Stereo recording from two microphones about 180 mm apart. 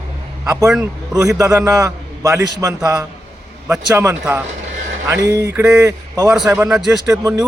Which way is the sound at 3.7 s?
15° right (ahead or behind).